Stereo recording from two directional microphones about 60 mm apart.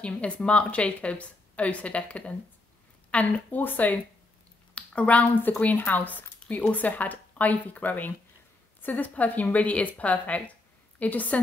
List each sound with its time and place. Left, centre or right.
0.0 s a woman's voice: centre